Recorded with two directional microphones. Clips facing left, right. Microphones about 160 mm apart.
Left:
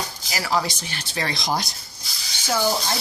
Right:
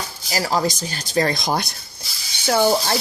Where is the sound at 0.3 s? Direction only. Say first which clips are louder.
Right 4 dB; 40° right (ahead or behind); by 1.7 s 55° right (ahead or behind).